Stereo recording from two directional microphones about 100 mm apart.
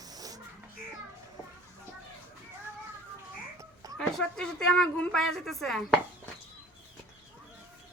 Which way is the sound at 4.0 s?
5° left (ahead or behind).